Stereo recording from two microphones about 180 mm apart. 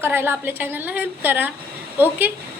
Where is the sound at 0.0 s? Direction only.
10° right (ahead or behind).